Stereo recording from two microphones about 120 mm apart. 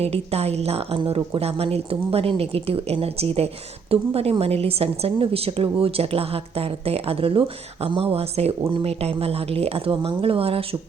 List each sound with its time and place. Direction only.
0.0 s a woman's voice: 60° right (ahead or behind)